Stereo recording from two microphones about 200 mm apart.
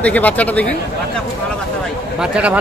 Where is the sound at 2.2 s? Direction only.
5° right (ahead or behind).